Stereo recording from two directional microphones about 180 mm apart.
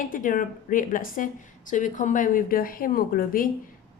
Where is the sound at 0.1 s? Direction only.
50° left (ahead or behind).